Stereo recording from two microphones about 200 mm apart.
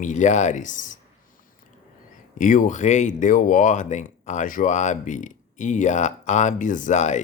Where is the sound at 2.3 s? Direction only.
40° left (ahead or behind).